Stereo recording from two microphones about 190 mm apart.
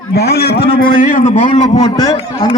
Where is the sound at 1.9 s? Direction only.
20° left (ahead or behind).